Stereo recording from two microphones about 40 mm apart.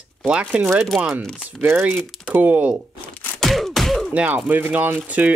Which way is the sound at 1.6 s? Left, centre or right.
Right.